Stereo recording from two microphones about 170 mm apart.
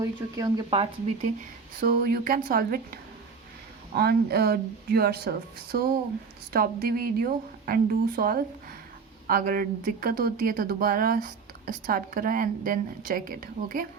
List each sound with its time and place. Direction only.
0.0 s speech: 20° right (ahead or behind)
0.7 s speech: 35° right (ahead or behind)
1.9 s speech: 55° right (ahead or behind)
6.5 s speech: 60° right (ahead or behind)